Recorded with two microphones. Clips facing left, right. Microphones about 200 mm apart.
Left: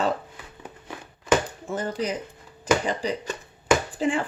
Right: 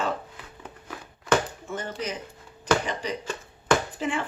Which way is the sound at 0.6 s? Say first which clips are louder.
Left 1 dB; 25° left (ahead or behind).